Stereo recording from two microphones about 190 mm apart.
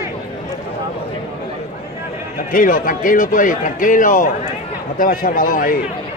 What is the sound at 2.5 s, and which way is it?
A man's voice, 45° left (ahead or behind).